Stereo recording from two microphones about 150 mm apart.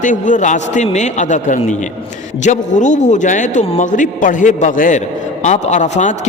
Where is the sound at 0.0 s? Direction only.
60° left (ahead or behind).